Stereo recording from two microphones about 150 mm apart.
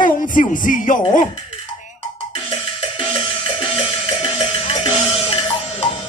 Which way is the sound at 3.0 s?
35° left (ahead or behind).